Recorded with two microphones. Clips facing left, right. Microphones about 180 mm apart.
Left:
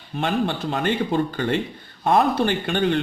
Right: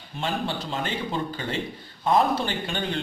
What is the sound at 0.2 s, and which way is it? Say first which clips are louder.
A man's voice: left 6 dB; 60° left (ahead or behind).